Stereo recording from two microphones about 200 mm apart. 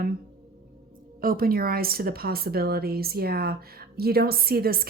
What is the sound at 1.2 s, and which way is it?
Speech, 45° right (ahead or behind).